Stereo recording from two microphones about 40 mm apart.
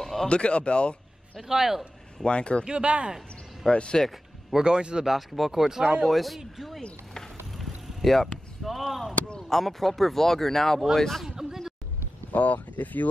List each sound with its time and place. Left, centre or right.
0.0 s a sound: centre
0.3 s a man's voice: left
1.5 s a man's voice: centre
2.2 s speech: left
2.6 s speech: right
3.6 s speech: left
4.6 s speech: right
5.0 s a man's voice: centre
5.6 s a man's voice: centre
6.0 s a man's voice: centre
7.5 s artillery fire: centre
9.5 s speech: centre
11.2 s a sound: centre
12.3 s speech: left